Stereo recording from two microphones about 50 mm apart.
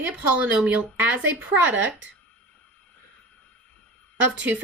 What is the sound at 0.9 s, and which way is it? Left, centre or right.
Speech, right.